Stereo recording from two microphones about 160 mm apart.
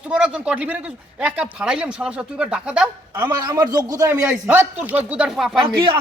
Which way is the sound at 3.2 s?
25° right (ahead or behind).